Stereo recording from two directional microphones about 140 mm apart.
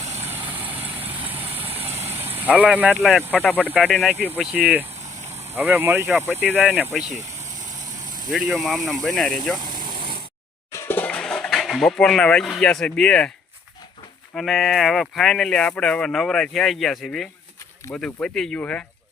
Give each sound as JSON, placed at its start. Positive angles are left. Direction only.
{"t": 0.2, "sound": "vehicle", "side_deg": -15}
{"t": 1.5, "sound": "vehicle", "side_deg": -45}
{"t": 2.0, "sound": "vehicle", "side_deg": -15}
{"t": 2.6, "sound": "speech", "side_deg": -10}
{"t": 3.0, "sound": "speech", "side_deg": 5}
{"t": 4.4, "sound": "speech", "side_deg": -10}
{"t": 8.3, "sound": "speech", "side_deg": 0}
{"t": 9.6, "sound": "vehicle", "side_deg": -30}
{"t": 10.7, "sound": "a sound", "side_deg": 15}
{"t": 14.3, "sound": "speech", "side_deg": 0}